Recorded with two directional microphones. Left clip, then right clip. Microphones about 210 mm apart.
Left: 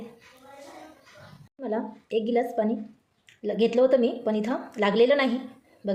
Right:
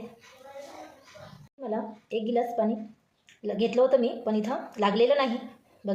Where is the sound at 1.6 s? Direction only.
35° left (ahead or behind).